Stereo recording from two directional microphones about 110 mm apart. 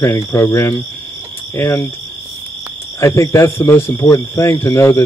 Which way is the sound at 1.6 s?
35° left (ahead or behind).